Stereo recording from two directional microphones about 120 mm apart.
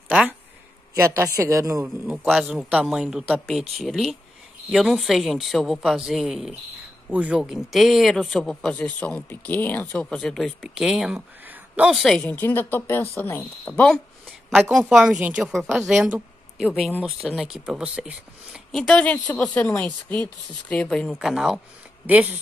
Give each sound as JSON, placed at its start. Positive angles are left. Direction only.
{"t": 0.1, "sound": "speech", "side_deg": -10}
{"t": 0.9, "sound": "a woman's voice", "side_deg": -25}
{"t": 2.0, "sound": "speech", "side_deg": -5}
{"t": 10.0, "sound": "a woman's voice", "side_deg": 5}
{"t": 14.5, "sound": "speech", "side_deg": 0}
{"t": 15.9, "sound": "a sound", "side_deg": -5}
{"t": 17.0, "sound": "speech", "side_deg": 0}
{"t": 18.7, "sound": "speech", "side_deg": 5}
{"t": 21.2, "sound": "speech", "side_deg": -5}
{"t": 22.0, "sound": "speech", "side_deg": -15}